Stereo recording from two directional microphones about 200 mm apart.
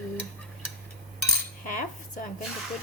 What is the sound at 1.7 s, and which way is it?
Cutlery, 40° left (ahead or behind).